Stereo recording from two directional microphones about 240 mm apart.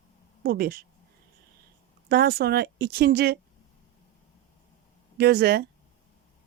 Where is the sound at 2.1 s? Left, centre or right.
Right.